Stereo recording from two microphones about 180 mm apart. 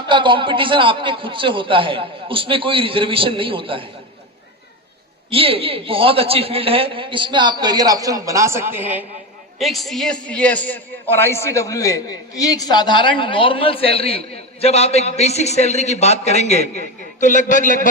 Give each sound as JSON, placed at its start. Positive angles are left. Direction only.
{"t": 0.1, "sound": "a woman's voice", "side_deg": -25}
{"t": 5.3, "sound": "a woman's voice", "side_deg": -30}